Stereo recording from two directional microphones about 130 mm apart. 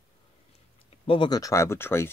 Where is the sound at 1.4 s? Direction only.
20° left (ahead or behind).